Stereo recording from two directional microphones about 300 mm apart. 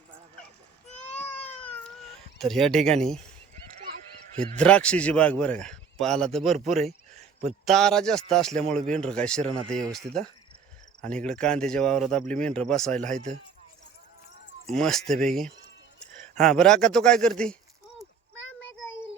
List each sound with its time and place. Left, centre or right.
1.1 s a sound: centre
2.4 s a man's voice: centre
4.4 s a man's voice: centre
14.7 s a man's voice: centre